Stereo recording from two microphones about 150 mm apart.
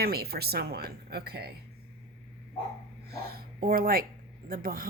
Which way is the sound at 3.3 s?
80° right.